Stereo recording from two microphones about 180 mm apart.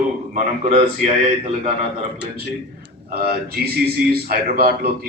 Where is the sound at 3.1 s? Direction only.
60° right (ahead or behind).